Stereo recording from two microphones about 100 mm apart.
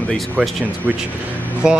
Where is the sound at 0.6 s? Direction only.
15° right (ahead or behind).